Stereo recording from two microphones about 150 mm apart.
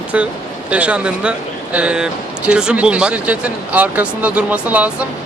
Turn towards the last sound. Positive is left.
turn(degrees=-10)  # may be behind; listen again after turning